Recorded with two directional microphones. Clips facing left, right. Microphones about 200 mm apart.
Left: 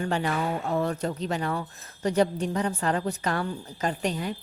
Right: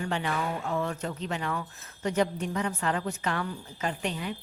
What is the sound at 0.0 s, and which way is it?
Speech, 40° left (ahead or behind).